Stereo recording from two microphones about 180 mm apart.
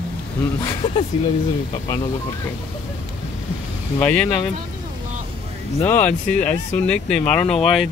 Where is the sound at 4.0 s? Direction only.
10° left (ahead or behind).